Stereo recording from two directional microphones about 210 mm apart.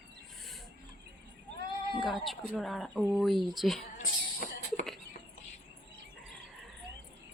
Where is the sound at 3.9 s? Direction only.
40° left (ahead or behind).